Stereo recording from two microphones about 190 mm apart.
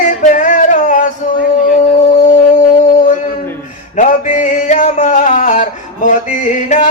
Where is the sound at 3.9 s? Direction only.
40° left (ahead or behind).